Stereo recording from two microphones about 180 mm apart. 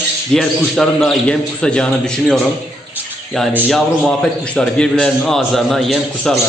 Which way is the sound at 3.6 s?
5° left (ahead or behind).